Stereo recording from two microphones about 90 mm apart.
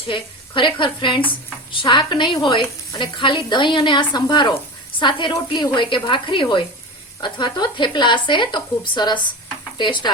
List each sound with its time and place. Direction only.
0.1 s speech: 65° left (ahead or behind)